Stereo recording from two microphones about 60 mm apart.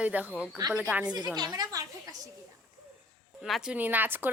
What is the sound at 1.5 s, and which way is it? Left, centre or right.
Speech, right.